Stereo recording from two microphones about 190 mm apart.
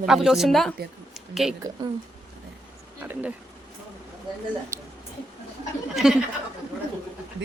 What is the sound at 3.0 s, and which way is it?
Bee, 10° right (ahead or behind).